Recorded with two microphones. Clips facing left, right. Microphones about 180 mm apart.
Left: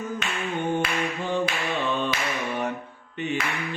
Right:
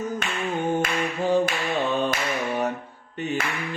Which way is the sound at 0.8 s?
40° right (ahead or behind).